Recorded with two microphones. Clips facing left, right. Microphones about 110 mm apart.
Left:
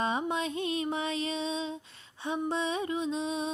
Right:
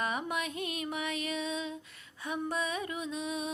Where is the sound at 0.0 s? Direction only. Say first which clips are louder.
Left 4 dB; 25° left (ahead or behind).